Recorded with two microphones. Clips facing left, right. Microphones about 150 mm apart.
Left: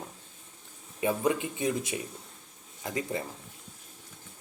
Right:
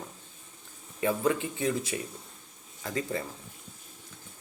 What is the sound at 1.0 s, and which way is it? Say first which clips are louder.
Speech: even; 20° left (ahead or behind).